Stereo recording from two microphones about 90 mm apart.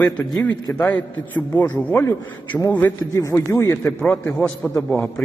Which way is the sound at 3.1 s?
35° left (ahead or behind).